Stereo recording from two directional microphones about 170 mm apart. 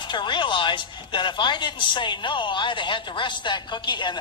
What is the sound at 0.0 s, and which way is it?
Speech, 25° left (ahead or behind).